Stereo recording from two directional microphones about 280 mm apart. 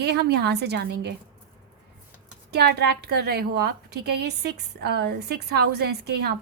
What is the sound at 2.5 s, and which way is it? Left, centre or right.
Speech, right.